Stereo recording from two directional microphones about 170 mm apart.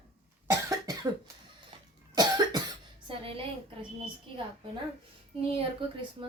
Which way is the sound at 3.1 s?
35° right (ahead or behind).